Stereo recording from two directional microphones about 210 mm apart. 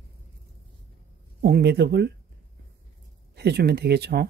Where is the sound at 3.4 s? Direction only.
50° right (ahead or behind).